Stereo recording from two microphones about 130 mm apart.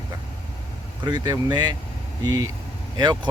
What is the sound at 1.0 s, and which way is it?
Speech, 30° right (ahead or behind).